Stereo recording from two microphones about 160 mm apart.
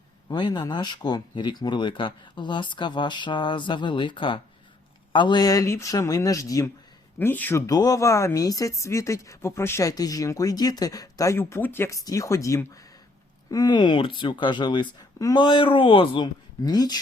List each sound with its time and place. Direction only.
0.3 s speech: 30° left (ahead or behind); by 7.6 s 10° left (ahead or behind)
7.7 s speech: 25° left (ahead or behind)